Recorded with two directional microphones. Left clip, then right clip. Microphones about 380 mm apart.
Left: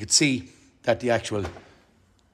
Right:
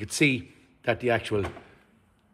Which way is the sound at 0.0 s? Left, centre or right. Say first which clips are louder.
Left 2 dB; centre.